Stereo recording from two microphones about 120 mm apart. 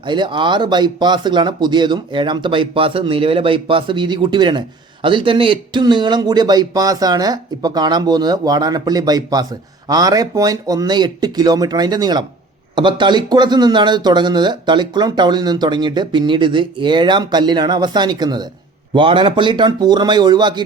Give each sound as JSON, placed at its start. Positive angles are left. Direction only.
{"t": 0.0, "sound": "speech", "side_deg": -40}